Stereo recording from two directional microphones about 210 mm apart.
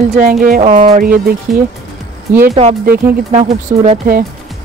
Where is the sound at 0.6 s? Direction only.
30° right (ahead or behind).